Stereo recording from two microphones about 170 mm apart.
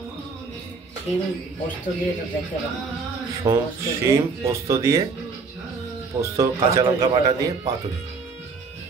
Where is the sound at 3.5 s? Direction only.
15° right (ahead or behind).